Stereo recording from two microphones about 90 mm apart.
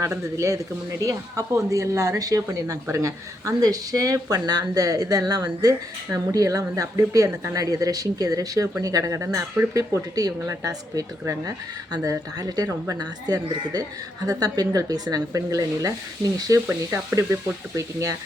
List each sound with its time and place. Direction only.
0.0 s speech: 35° right (ahead or behind); by 5.7 s 50° right (ahead or behind)
6.1 s speech: 40° right (ahead or behind)